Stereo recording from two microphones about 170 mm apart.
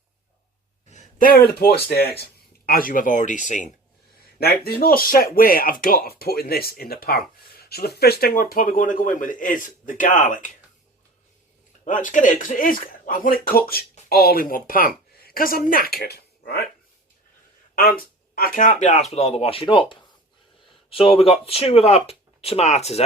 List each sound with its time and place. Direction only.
0.9 s speech: 50° left (ahead or behind)
4.4 s speech: 65° left (ahead or behind); by 10.5 s 50° left (ahead or behind)
11.9 s speech: 50° left (ahead or behind); by 16.6 s 70° left (ahead or behind)
17.7 s speech: 55° left (ahead or behind); by 23.0 s 40° left (ahead or behind)